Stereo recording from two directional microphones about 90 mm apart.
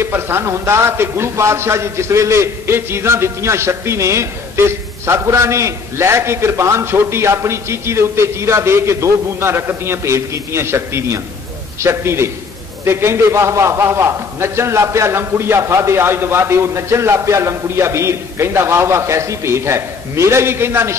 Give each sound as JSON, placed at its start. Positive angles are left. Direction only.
{"t": 0.0, "sound": "a man's voice", "side_deg": -25}